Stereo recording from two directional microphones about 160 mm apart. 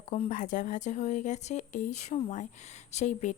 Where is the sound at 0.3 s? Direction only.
55° left (ahead or behind).